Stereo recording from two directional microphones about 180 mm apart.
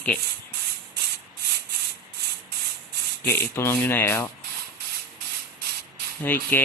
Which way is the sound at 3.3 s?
15° left (ahead or behind).